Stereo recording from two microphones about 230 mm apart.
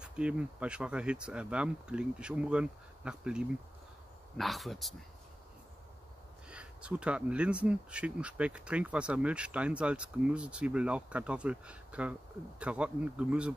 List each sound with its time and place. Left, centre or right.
0.0 s speech: centre
6.5 s speech: centre